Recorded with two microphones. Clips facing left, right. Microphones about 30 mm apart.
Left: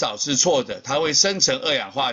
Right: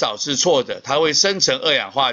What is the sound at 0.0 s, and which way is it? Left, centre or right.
Speech, centre.